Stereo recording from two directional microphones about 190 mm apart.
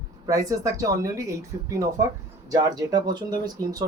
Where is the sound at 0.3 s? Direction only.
15° right (ahead or behind).